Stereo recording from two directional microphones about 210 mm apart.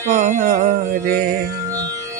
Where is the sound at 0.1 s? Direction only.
35° right (ahead or behind).